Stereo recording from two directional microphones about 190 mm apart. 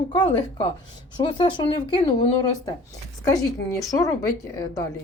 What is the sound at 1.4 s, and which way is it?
Speech, 25° left (ahead or behind).